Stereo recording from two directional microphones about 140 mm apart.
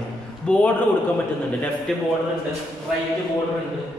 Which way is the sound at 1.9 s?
Centre (ahead or behind).